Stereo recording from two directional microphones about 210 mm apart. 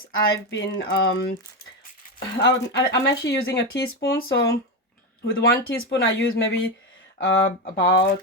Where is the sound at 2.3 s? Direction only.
55° left (ahead or behind).